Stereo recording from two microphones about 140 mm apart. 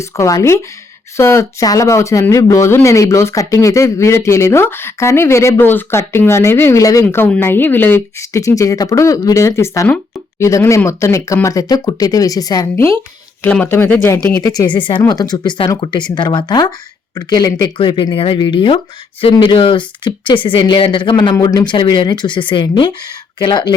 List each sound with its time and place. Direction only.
0.0 s speech: 20° left (ahead or behind)
14.5 s speech: 30° left (ahead or behind)